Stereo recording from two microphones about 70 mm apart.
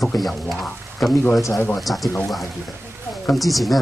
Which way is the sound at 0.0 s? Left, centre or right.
Centre.